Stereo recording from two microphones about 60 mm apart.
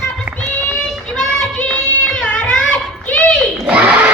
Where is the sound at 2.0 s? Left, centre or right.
Centre.